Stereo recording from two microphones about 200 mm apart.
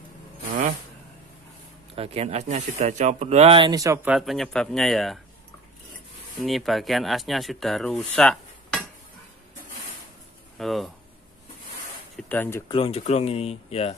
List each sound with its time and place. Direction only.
2.0 s speech: 30° right (ahead or behind); by 5.2 s centre (ahead or behind)
6.4 s speech: centre (ahead or behind)
10.6 s speech: centre (ahead or behind)
12.2 s speech: 10° left (ahead or behind)
12.7 s speech: 30° left (ahead or behind)